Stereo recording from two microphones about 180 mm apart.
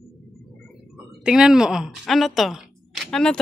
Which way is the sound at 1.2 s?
5° right (ahead or behind).